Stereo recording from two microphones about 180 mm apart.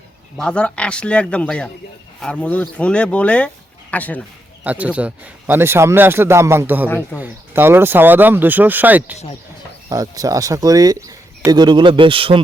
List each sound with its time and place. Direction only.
0.3 s speech: 5° left (ahead or behind)
4.6 s a man's voice: 10° right (ahead or behind)
6.8 s speech: 10° left (ahead or behind)
7.2 s a man's voice: 10° right (ahead or behind); by 12.4 s 30° right (ahead or behind)